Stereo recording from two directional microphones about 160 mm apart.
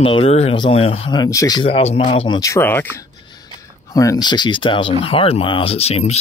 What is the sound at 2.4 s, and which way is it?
Speech, 15° left (ahead or behind).